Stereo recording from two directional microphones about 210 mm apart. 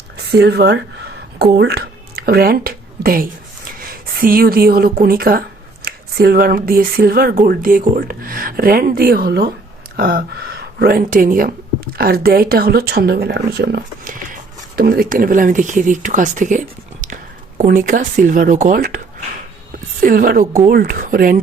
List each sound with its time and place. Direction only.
0.2 s speech: 50° right (ahead or behind)
1.5 s a sound: 50° right (ahead or behind)
3.8 s speech: 45° right (ahead or behind)